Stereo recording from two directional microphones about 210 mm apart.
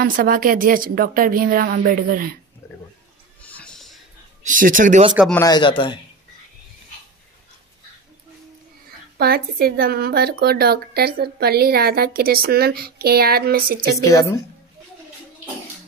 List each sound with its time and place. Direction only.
0.0 s a woman's voice: 40° right (ahead or behind)
2.6 s a sound: 15° left (ahead or behind)
3.4 s music: 5° left (ahead or behind)
4.4 s speech: 40° right (ahead or behind)
5.3 s speech: 15° left (ahead or behind)
9.2 s a woman's voice: 45° right (ahead or behind)
14.0 s a woman's voice: 15° left (ahead or behind)